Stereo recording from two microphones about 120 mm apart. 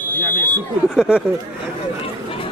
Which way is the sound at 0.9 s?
5° right (ahead or behind).